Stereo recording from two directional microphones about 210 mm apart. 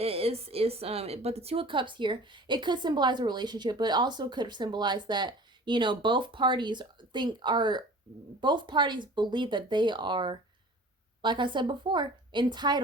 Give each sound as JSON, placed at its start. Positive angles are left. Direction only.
{"t": 0.0, "sound": "a woman's voice", "side_deg": -30}